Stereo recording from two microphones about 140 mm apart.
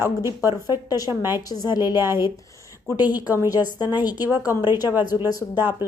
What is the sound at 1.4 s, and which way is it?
Speech, 30° left (ahead or behind).